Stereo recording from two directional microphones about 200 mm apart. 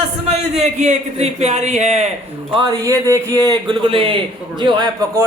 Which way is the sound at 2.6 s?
20° right (ahead or behind).